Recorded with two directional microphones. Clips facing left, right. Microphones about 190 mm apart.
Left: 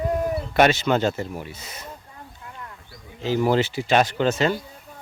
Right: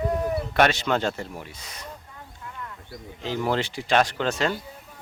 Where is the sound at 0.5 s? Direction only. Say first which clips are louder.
Left 4 dB; 5° left (ahead or behind).